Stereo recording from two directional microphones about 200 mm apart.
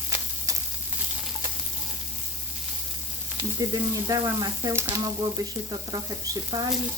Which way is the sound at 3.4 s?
20° right (ahead or behind).